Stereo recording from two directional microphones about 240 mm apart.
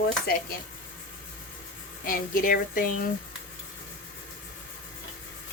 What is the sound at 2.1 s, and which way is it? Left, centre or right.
Speech, left.